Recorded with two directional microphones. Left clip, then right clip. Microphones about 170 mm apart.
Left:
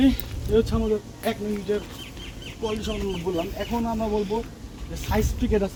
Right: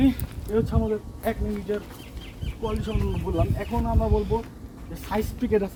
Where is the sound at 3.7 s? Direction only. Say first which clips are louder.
Even; 15° left (ahead or behind).